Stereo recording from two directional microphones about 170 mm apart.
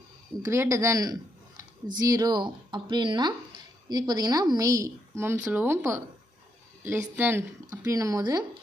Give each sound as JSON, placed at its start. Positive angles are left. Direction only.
{"t": 0.4, "sound": "a woman's voice", "side_deg": -15}